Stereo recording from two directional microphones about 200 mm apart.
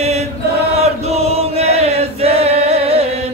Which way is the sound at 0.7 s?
30° right (ahead or behind).